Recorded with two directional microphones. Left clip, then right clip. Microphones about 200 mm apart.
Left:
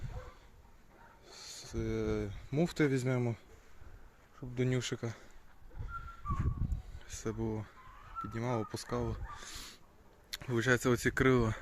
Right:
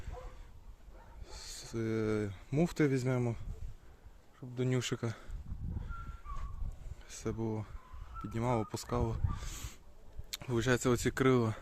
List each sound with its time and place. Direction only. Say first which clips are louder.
1.3 s speech: right 1 dB; 20° right (ahead or behind); by 3.4 s 5° right (ahead or behind)
4.4 s speech: left 2 dB; 20° left (ahead or behind)
4.8 s speech: right 1 dB; 20° right (ahead or behind)
7.0 s speech: even; centre (ahead or behind)
8.2 s speech: right 2 dB; 15° right (ahead or behind)
10.2 s speech: left 2 dB; centre (ahead or behind)